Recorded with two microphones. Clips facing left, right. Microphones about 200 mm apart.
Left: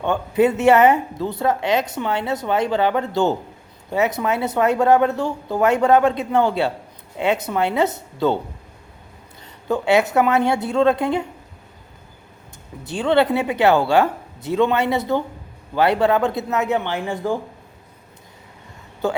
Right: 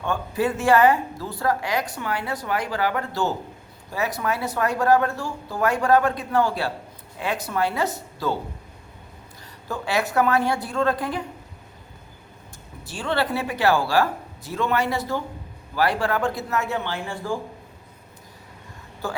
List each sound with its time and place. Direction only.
0.0 s speech: 20° left (ahead or behind)
9.6 s speech: 25° left (ahead or behind)
12.8 s speech: 20° left (ahead or behind)